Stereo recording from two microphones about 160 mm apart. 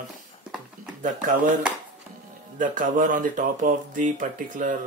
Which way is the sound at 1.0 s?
55° right (ahead or behind).